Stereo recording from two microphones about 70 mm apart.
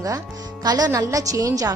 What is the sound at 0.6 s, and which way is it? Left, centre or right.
Speech, right.